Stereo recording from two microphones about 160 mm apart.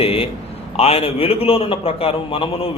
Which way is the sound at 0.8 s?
35° left (ahead or behind).